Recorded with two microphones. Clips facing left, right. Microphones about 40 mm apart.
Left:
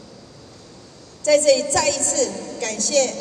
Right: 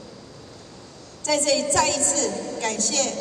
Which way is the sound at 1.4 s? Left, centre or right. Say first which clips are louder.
Left 4 dB; right.